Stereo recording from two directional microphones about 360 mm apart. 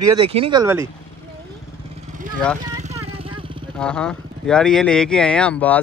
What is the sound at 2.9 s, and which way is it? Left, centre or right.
Vehicle, centre.